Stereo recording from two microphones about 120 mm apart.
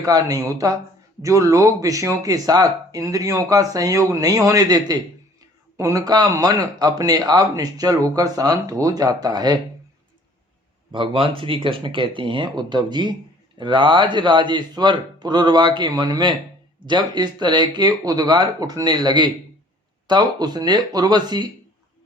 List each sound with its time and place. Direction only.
0.0 s speech: 30° right (ahead or behind)
10.9 s speech: 45° right (ahead or behind)